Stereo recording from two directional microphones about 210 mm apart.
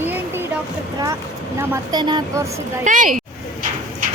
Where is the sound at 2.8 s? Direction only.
40° right (ahead or behind).